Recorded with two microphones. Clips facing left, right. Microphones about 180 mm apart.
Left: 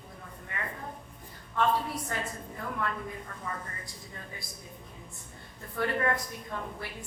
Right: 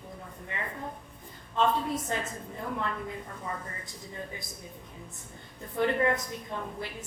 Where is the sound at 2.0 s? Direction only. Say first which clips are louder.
Right 2 dB; 20° right (ahead or behind).